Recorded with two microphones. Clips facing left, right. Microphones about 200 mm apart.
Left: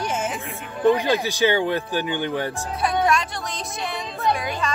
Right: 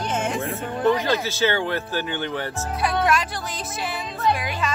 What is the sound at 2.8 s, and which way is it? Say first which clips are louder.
Music: left 1 dB; 5° right (ahead or behind).